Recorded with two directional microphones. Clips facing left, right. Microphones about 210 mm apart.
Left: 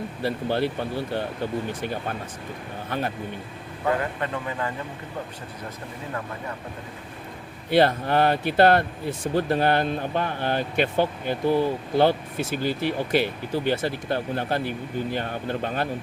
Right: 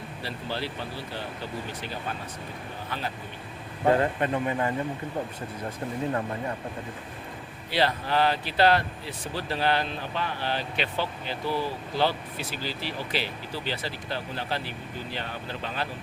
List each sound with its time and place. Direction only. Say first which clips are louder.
0.2 s speech: left 9 dB; 55° left (ahead or behind)
3.8 s speech: right 3 dB; 30° right (ahead or behind)
7.7 s speech: left 6 dB; 50° left (ahead or behind)